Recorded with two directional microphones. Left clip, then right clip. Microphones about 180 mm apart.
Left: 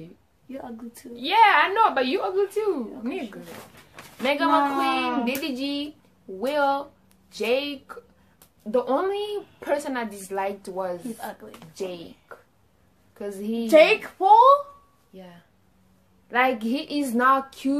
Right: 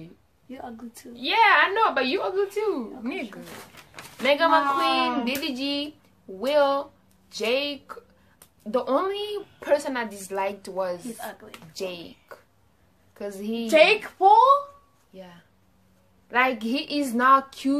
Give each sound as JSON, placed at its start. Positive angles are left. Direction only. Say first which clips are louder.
{"t": 1.1, "sound": "a woman's voice", "louder": "left 1 dB", "side_deg": -5}
{"t": 13.7, "sound": "a child's voice", "louder": "left 2 dB", "side_deg": 20}
{"t": 16.3, "sound": "a woman's voice", "louder": "left 1 dB", "side_deg": 0}